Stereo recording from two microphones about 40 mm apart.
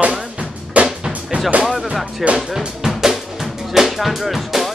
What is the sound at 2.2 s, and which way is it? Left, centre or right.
Speech, centre.